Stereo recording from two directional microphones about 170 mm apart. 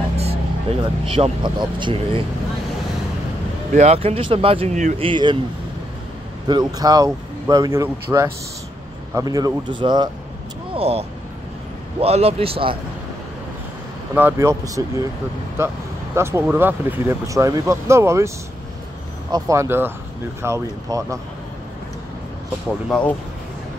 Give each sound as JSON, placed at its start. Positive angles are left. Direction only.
{"t": 0.2, "sound": "speech", "side_deg": -35}
{"t": 3.7, "sound": "speech", "side_deg": -40}
{"t": 5.0, "sound": "speech", "side_deg": -25}
{"t": 6.4, "sound": "speech", "side_deg": -25}
{"t": 14.1, "sound": "speech", "side_deg": -15}
{"t": 19.3, "sound": "speech", "side_deg": -20}
{"t": 22.8, "sound": "speech", "side_deg": 5}